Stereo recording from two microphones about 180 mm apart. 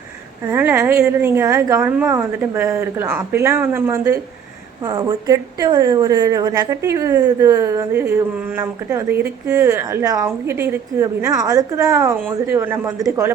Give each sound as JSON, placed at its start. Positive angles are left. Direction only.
{"t": 0.4, "sound": "a woman's voice", "side_deg": -10}